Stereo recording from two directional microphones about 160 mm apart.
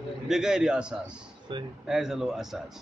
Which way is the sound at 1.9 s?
Centre (ahead or behind).